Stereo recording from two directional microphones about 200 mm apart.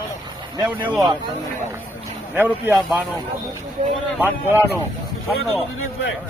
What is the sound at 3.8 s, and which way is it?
Speech, 35° right (ahead or behind).